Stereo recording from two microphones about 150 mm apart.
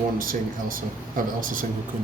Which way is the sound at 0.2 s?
65° right (ahead or behind).